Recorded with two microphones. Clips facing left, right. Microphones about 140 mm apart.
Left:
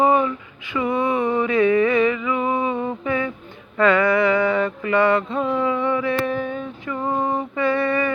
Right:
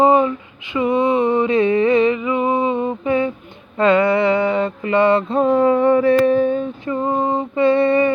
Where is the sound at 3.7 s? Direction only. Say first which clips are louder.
Right 3 dB; 25° right (ahead or behind).